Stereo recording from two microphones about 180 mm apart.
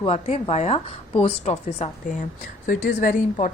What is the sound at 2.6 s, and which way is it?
Speech, 50° left (ahead or behind).